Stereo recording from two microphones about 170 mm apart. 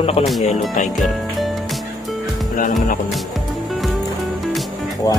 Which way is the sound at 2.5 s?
50° left (ahead or behind).